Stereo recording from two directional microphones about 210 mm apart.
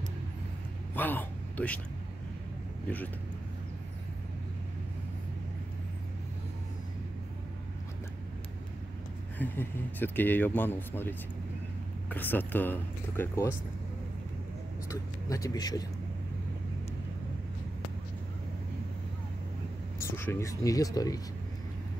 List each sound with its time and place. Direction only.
0.9 s speech: 10° left (ahead or behind)
9.4 s speech: 10° left (ahead or behind)
14.9 s speech: 15° left (ahead or behind)
20.0 s speech: 10° left (ahead or behind)